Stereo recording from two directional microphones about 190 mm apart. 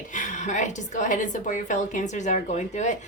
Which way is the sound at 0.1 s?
40° left (ahead or behind).